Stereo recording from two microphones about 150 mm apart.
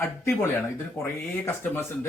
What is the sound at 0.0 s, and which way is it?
A man's voice, 15° left (ahead or behind).